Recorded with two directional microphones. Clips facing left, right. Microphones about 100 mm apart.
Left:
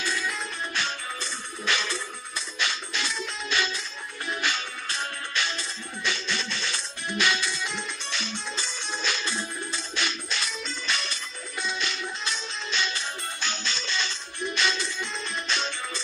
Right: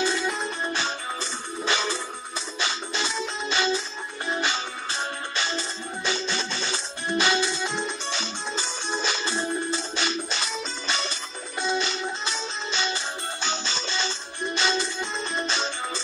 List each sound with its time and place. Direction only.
0.0 s music: 30° right (ahead or behind)